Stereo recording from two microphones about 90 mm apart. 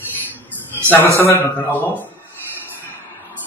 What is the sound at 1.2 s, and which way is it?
Speech, 30° left (ahead or behind).